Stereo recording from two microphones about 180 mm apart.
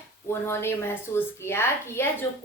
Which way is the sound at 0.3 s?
15° left (ahead or behind).